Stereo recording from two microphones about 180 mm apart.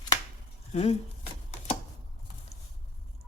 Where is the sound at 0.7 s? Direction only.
35° left (ahead or behind).